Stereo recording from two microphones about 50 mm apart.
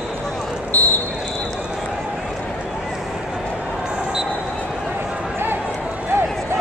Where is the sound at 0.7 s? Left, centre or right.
Left.